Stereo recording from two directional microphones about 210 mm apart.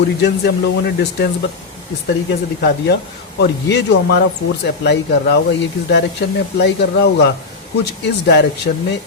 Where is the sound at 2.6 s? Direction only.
50° left (ahead or behind).